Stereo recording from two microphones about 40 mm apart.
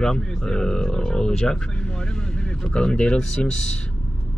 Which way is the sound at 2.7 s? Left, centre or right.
Left.